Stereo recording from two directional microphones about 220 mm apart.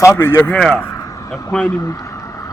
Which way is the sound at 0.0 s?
10° left (ahead or behind).